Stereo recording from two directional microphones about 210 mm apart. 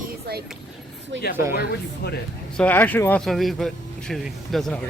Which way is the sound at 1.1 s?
60° right (ahead or behind).